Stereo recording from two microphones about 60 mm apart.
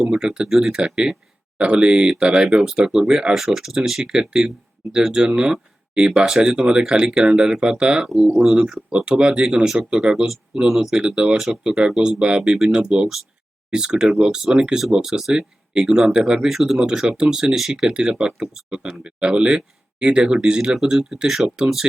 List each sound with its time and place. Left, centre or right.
0.0 s speech: centre